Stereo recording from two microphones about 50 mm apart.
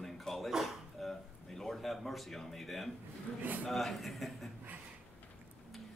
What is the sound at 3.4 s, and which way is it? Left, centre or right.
Speech, right.